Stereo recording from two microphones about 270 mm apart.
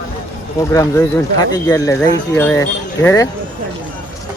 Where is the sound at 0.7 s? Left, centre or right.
Centre.